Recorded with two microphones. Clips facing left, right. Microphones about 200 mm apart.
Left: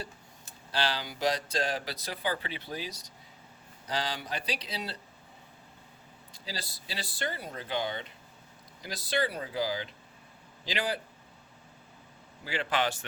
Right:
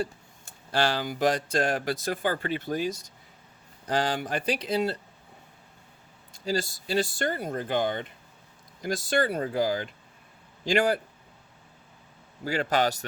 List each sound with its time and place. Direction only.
0.0 s speech: 50° right (ahead or behind)
6.3 s speech: 50° right (ahead or behind)
12.5 s a man's voice: 40° right (ahead or behind)